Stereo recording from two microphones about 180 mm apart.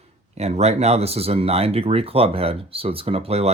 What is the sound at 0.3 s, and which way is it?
Speech, 35° right (ahead or behind).